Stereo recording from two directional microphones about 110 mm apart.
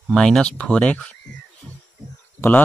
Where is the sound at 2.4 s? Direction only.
15° left (ahead or behind).